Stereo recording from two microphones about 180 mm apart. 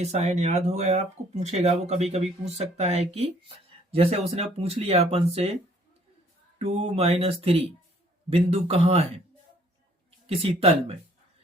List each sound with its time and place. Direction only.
0.0 s speech: 35° right (ahead or behind)
6.6 s speech: 35° right (ahead or behind)
10.2 s speech: 35° right (ahead or behind)